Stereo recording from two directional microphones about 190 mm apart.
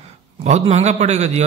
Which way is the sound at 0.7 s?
35° right (ahead or behind).